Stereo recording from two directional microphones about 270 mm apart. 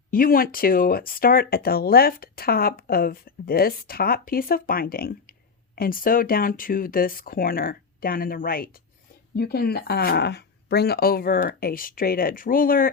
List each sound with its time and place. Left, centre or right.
0.1 s speech: left